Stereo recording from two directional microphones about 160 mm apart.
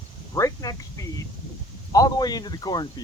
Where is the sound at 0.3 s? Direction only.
20° left (ahead or behind).